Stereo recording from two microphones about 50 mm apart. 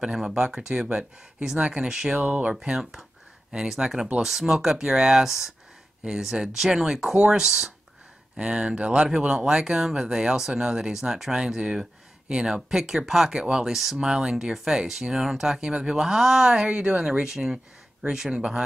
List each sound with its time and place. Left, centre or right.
0.0 s speech: centre
2.7 s speech: centre